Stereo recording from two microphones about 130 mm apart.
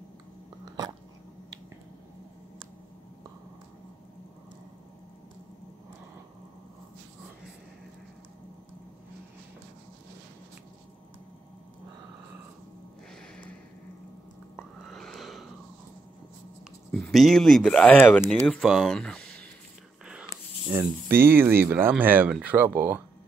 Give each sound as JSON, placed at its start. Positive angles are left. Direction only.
{"t": 14.6, "sound": "a sound", "side_deg": 5}
{"t": 16.9, "sound": "speech", "side_deg": 0}
{"t": 20.7, "sound": "speech", "side_deg": -20}